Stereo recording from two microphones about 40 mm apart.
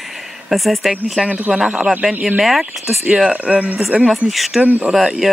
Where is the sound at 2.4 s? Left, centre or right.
Centre.